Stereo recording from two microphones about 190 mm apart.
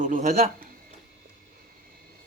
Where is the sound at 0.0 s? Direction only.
40° right (ahead or behind).